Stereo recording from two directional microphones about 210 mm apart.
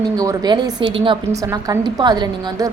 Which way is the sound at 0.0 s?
20° right (ahead or behind).